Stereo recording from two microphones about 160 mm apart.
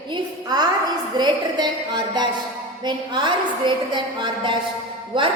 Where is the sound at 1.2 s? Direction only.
25° right (ahead or behind).